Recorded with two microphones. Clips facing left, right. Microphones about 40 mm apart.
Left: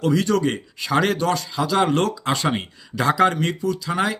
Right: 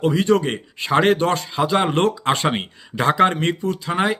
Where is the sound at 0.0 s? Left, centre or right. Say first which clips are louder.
Right 2 dB; right.